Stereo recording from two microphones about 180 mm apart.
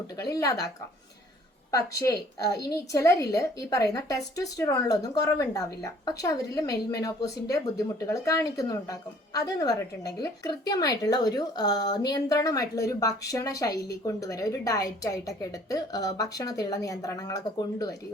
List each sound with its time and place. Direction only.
0.2 s speech: 20° left (ahead or behind)
1.7 s speech: 15° left (ahead or behind)